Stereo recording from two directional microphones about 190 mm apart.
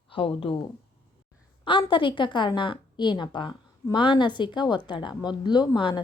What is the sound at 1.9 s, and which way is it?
A woman's voice, 25° left (ahead or behind).